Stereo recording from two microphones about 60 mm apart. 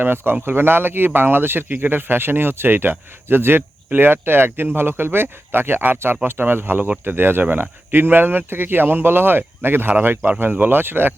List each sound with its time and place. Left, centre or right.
0.0 s speech: right